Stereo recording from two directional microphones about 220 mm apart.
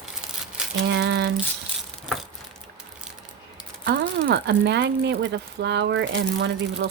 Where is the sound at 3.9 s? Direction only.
50° right (ahead or behind).